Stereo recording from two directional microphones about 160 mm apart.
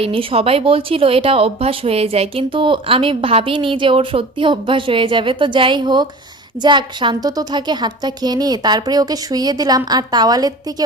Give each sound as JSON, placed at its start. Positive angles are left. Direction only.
{"t": 0.0, "sound": "a woman's voice", "side_deg": -35}